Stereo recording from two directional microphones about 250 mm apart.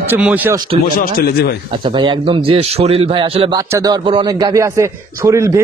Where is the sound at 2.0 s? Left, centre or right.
Centre.